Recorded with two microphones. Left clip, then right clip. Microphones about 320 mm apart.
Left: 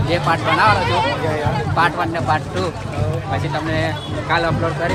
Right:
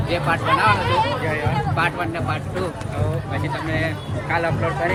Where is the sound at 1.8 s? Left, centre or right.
Centre.